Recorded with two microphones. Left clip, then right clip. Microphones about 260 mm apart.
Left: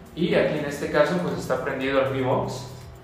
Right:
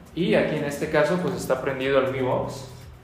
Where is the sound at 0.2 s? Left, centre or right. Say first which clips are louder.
Even; right.